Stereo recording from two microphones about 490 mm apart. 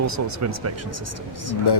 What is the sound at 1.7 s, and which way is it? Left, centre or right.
Speech, left.